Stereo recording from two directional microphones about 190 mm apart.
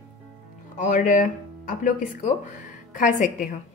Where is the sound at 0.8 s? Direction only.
40° left (ahead or behind).